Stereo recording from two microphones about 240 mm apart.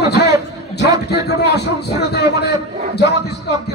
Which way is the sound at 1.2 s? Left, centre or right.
Left.